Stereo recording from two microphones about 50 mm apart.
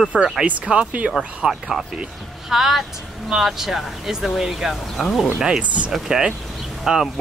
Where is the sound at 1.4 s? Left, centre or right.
Centre.